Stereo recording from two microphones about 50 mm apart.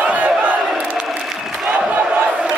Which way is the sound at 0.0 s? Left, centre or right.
Right.